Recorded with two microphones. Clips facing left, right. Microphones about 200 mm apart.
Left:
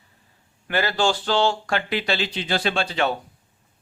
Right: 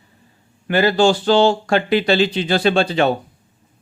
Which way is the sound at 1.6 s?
30° right (ahead or behind).